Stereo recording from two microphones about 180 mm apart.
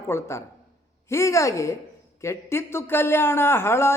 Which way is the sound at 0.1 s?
15° left (ahead or behind).